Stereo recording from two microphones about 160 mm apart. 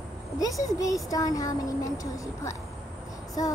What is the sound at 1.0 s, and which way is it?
Speech, 20° left (ahead or behind).